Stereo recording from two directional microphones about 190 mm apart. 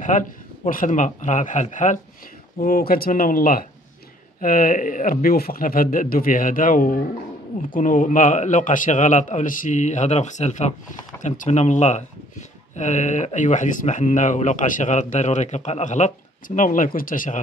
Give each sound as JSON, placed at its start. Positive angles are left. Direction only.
{"t": 0.1, "sound": "a man's voice", "side_deg": 40}